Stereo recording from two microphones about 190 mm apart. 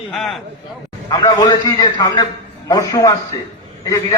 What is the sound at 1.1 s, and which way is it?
A man's voice, 20° left (ahead or behind).